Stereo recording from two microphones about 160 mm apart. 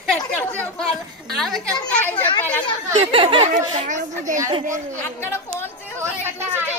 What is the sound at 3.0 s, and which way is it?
Speech, 35° right (ahead or behind).